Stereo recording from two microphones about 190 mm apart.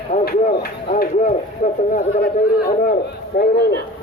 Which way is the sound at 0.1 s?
45° left (ahead or behind).